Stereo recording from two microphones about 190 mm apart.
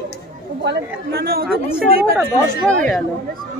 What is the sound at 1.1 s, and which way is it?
Speech, 55° right (ahead or behind).